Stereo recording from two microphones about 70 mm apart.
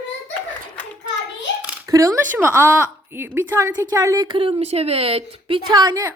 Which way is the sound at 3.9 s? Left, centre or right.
Right.